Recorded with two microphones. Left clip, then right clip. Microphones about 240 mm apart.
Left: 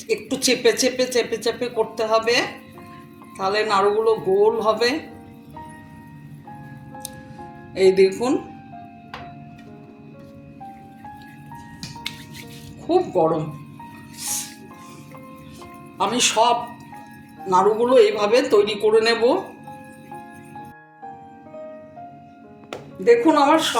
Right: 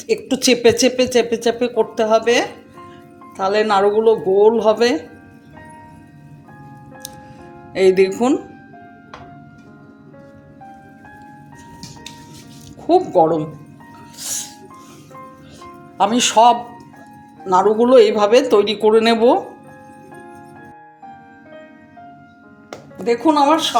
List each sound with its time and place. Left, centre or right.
0.1 s a woman's voice: right
7.7 s a woman's voice: right
13.2 s speech: right
14.2 s music: right
16.0 s a woman's voice: right
23.0 s a woman's voice: right